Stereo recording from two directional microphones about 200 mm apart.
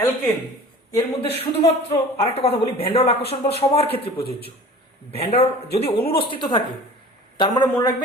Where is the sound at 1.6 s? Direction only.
30° left (ahead or behind).